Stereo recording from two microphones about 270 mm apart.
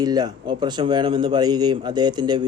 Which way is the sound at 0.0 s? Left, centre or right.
Centre.